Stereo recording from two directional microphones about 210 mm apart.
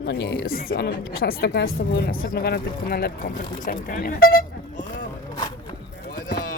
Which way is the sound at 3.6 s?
40° left (ahead or behind).